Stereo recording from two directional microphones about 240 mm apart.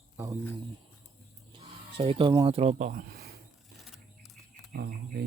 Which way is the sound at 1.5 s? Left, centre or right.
Right.